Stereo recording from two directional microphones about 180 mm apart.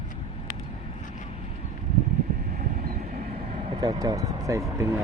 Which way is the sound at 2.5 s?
55° right (ahead or behind).